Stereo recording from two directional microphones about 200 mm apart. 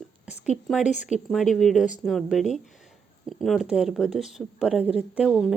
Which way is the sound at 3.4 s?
Centre (ahead or behind).